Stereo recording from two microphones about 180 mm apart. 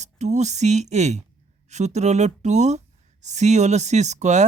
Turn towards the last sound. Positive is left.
turn(degrees=-40)  # may be behind; listen again after turning